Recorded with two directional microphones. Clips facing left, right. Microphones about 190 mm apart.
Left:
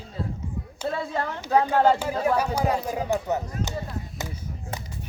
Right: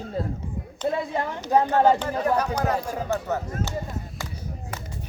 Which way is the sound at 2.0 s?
10° left (ahead or behind).